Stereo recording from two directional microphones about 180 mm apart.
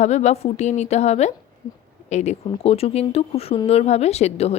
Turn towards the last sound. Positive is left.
turn(degrees=35)  # may be behind; listen again after turning